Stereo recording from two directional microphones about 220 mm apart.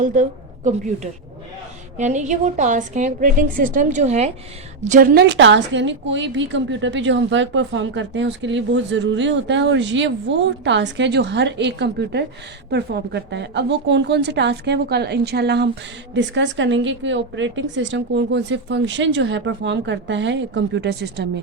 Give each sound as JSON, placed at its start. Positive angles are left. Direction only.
{"t": 0.0, "sound": "a woman's voice", "side_deg": -35}
{"t": 2.0, "sound": "a woman's voice", "side_deg": -35}